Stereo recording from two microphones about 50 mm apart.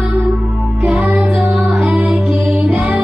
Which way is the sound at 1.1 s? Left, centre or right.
Centre.